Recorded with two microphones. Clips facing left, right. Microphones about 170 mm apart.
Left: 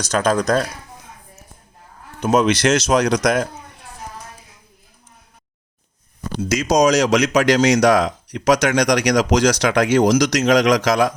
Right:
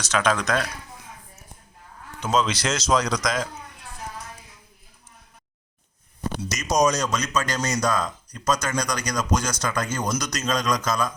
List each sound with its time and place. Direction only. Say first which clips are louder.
0.1 s speech: left 5 dB; 40° left (ahead or behind)
2.2 s speech: left 8 dB; 65° left (ahead or behind)
6.6 s speech: left 6 dB; 90° left